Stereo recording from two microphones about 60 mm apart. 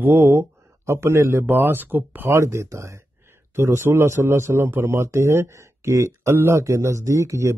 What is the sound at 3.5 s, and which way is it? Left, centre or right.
Speech, right.